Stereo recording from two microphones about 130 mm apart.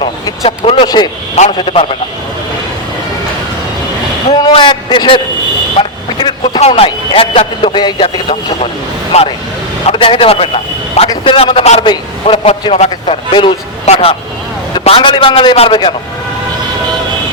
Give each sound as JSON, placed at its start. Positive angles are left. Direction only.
{"t": 0.4, "sound": "a sound", "side_deg": 50}
{"t": 0.9, "sound": "a man's voice", "side_deg": 35}
{"t": 4.4, "sound": "a man's voice", "side_deg": 35}
{"t": 5.7, "sound": "vehicle", "side_deg": 40}
{"t": 6.6, "sound": "a man's voice", "side_deg": 50}
{"t": 9.1, "sound": "speech", "side_deg": 60}
{"t": 9.9, "sound": "a man's voice", "side_deg": 45}
{"t": 13.8, "sound": "speech", "side_deg": 50}